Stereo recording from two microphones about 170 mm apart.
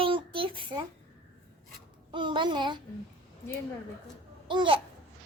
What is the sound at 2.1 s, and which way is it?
Speech, 30° right (ahead or behind).